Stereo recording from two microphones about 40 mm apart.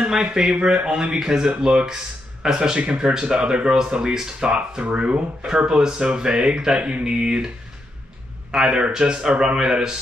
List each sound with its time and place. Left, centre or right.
0.1 s speech: centre
4.8 s speech: right
8.6 s speech: right